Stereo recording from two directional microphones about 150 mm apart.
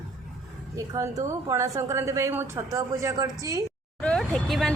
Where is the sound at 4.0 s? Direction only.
5° left (ahead or behind).